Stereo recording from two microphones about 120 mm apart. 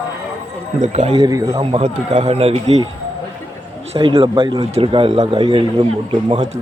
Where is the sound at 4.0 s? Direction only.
45° right (ahead or behind).